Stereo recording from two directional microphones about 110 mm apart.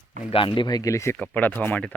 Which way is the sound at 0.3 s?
50° left (ahead or behind).